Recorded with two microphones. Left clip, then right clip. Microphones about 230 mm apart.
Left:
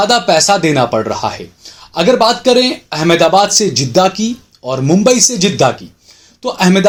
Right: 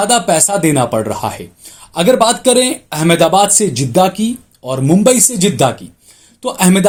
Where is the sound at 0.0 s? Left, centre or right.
Right.